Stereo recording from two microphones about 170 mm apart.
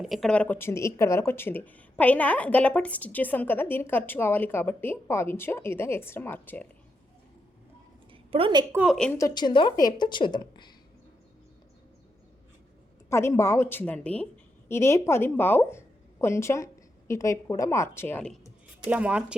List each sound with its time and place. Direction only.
0.0 s speech: centre (ahead or behind)
8.1 s a sound: 30° right (ahead or behind)
8.7 s speech: 5° right (ahead or behind)
9.1 s a woman's voice: 20° left (ahead or behind)
13.1 s a woman's voice: 15° left (ahead or behind)
18.9 s speech: 5° right (ahead or behind)